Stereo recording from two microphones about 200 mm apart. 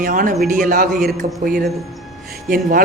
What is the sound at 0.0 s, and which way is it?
Speech, 40° right (ahead or behind).